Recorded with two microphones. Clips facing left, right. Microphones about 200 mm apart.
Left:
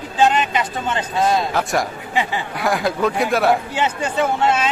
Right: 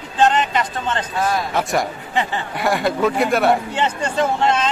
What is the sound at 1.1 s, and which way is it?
Speech, 25° left (ahead or behind).